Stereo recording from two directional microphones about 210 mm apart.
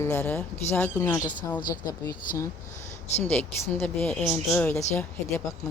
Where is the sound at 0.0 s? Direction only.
10° left (ahead or behind).